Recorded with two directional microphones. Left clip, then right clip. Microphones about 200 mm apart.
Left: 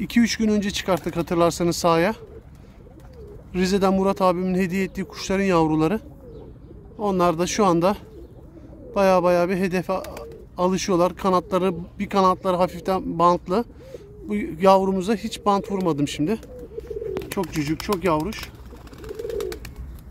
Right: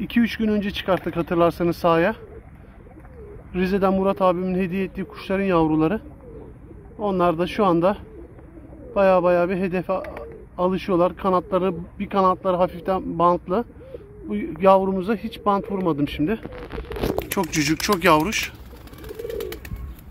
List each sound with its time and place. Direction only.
0.1 s a man's voice: 15° left (ahead or behind)
3.5 s a man's voice: 15° left (ahead or behind)
17.5 s speech: centre (ahead or behind)